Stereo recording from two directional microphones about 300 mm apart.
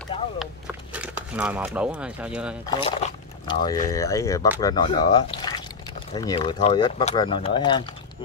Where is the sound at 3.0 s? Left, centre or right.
Left.